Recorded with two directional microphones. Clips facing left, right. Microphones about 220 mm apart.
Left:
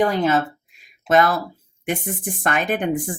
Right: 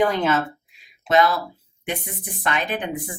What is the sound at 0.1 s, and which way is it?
Speech, 40° left (ahead or behind).